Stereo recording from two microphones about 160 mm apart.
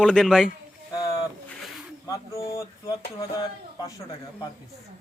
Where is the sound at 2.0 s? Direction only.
20° left (ahead or behind).